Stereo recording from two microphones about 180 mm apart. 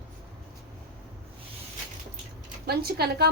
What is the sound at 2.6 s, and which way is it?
Speech, 60° right (ahead or behind).